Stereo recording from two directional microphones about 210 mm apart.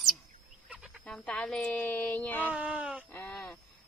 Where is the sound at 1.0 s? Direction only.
5° left (ahead or behind).